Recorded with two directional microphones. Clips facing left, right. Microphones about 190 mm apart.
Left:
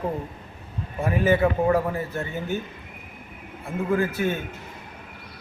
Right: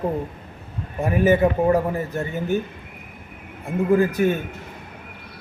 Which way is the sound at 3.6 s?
15° right (ahead or behind).